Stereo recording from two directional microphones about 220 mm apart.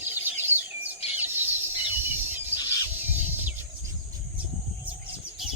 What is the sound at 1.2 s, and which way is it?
Chicken, 10° right (ahead or behind).